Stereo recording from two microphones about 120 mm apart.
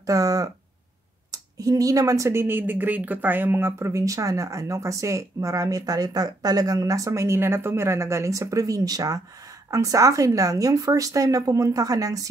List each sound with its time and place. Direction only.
0.0 s speech: 30° right (ahead or behind)